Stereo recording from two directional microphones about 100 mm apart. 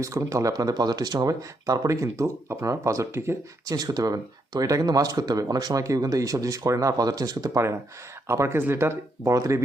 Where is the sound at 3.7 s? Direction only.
40° right (ahead or behind).